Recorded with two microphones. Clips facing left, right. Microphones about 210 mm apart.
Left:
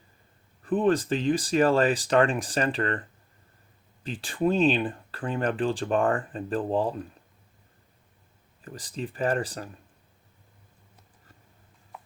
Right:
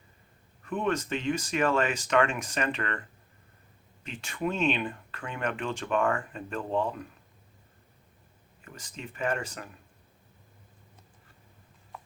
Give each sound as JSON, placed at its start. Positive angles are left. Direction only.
{"t": 0.6, "sound": "speech", "side_deg": 35}
{"t": 4.0, "sound": "speech", "side_deg": 35}
{"t": 8.6, "sound": "speech", "side_deg": 35}